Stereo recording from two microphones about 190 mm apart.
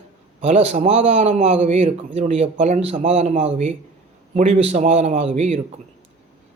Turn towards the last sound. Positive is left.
turn(degrees=-40)  # may be behind; listen again after turning